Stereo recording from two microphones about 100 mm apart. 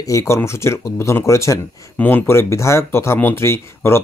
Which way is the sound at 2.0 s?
20° left (ahead or behind).